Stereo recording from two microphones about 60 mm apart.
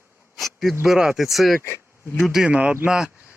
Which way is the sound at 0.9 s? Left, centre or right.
Centre.